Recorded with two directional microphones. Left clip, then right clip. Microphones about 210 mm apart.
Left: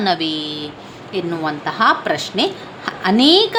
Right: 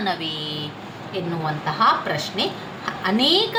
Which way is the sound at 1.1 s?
55° left (ahead or behind).